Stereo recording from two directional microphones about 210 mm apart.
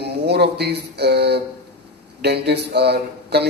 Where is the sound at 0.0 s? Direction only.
50° right (ahead or behind).